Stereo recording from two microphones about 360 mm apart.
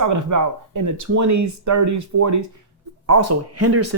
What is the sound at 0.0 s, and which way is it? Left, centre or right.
Speech, right.